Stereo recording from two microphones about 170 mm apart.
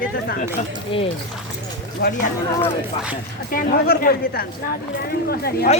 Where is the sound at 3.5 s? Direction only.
60° left (ahead or behind).